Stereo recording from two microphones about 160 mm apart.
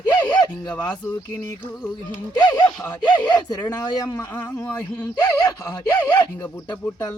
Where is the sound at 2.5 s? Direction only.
25° left (ahead or behind).